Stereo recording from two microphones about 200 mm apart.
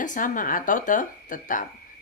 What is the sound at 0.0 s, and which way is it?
A woman's voice, 40° left (ahead or behind).